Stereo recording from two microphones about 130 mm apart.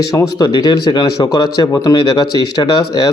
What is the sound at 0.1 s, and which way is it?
Speech, 30° left (ahead or behind).